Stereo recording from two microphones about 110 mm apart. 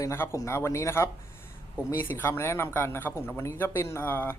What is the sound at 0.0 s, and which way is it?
Speech, 25° left (ahead or behind).